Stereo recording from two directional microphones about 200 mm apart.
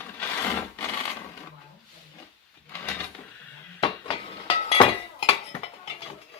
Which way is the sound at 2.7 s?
10° left (ahead or behind).